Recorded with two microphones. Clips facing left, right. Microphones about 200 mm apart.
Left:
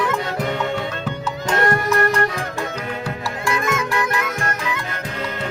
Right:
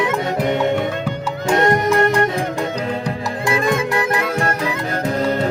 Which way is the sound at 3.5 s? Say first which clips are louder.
Right 4 dB; 30° right (ahead or behind).